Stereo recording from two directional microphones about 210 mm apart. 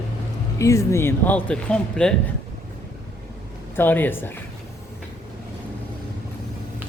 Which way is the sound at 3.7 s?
10° left (ahead or behind).